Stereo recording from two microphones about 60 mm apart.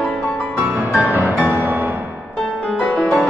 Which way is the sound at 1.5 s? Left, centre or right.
Right.